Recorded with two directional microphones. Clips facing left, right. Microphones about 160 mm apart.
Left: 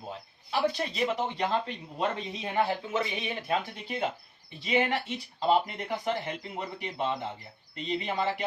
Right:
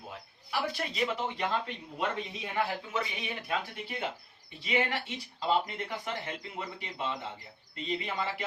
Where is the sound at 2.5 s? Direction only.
30° left (ahead or behind).